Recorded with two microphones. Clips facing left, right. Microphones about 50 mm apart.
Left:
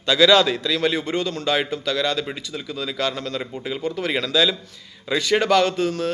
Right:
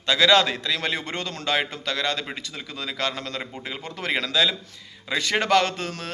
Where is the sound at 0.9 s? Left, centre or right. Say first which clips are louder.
Left 6 dB; right.